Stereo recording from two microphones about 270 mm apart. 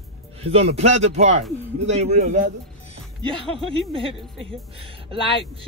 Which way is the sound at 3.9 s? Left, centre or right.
Centre.